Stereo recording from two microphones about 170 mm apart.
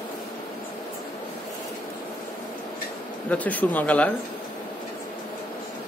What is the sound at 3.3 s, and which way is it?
Speech, 10° left (ahead or behind).